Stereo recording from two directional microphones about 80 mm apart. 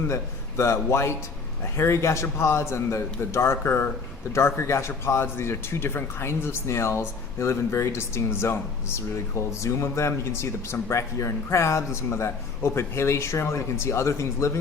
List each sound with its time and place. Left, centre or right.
0.1 s a man's voice: left